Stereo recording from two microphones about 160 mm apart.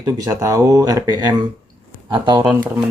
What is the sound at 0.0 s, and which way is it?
Speech, 20° right (ahead or behind).